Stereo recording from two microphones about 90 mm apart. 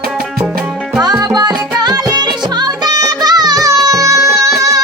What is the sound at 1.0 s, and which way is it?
Music, 45° right (ahead or behind).